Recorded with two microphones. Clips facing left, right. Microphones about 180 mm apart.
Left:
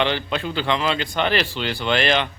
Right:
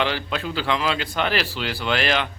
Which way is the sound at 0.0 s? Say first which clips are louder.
Left 2 dB; 5° right (ahead or behind).